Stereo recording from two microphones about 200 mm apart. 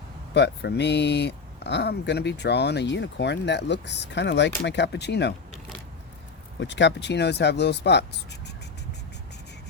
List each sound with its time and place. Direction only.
0.3 s speech: 60° left (ahead or behind)
6.6 s speech: 60° left (ahead or behind)